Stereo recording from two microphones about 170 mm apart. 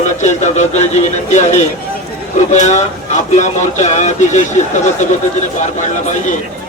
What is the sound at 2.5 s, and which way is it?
Speech, 45° left (ahead or behind).